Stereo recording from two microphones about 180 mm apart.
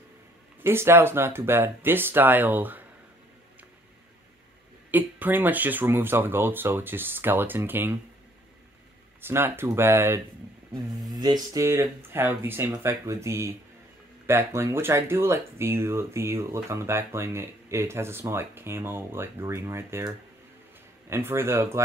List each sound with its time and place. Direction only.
0.7 s speech: 15° right (ahead or behind)
4.9 s speech: 10° right (ahead or behind)
9.2 s speech: 15° right (ahead or behind)
21.1 s speech: 15° right (ahead or behind)